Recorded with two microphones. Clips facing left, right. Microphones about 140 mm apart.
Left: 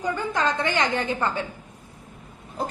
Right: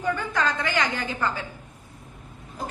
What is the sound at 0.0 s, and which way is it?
A woman's voice, 20° left (ahead or behind).